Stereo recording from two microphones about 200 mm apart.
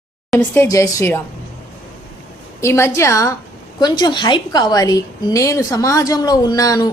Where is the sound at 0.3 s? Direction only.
15° left (ahead or behind).